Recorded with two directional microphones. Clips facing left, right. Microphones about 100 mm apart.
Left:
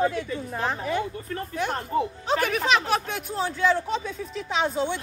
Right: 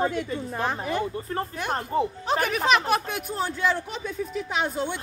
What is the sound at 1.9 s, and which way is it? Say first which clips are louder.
Speech: right 1 dB; 30° right (ahead or behind).